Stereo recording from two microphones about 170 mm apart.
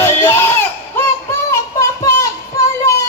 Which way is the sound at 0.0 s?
15° left (ahead or behind).